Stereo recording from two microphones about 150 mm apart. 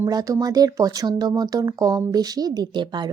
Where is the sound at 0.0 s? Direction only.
25° right (ahead or behind).